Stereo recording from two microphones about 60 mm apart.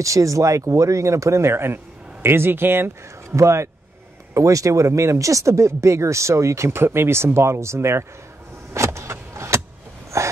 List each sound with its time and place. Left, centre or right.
0.0 s speech: right
3.3 s speech: right
8.7 s vehicle: right
10.1 s a sound: right